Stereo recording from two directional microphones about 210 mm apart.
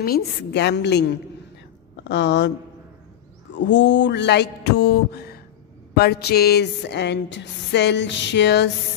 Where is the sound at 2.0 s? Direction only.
55° left (ahead or behind).